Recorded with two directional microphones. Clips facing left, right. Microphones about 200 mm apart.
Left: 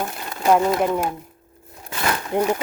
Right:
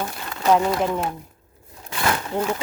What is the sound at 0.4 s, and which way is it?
Speech, 10° left (ahead or behind).